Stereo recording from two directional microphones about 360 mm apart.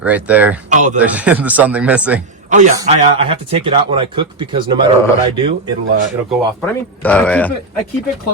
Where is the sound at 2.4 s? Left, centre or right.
Centre.